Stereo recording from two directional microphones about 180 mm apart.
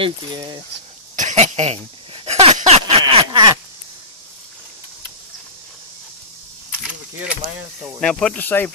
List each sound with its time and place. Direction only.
0.0 s speech: 25° right (ahead or behind)
1.1 s a sound: 40° right (ahead or behind)
3.1 s speech: 30° right (ahead or behind)
7.8 s speech: 5° left (ahead or behind)